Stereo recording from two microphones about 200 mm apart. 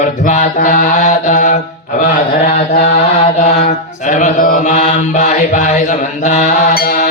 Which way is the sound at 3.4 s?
35° left (ahead or behind).